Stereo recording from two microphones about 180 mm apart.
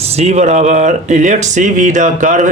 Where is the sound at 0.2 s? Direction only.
40° right (ahead or behind).